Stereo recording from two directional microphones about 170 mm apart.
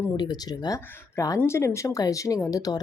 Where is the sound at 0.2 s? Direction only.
25° left (ahead or behind).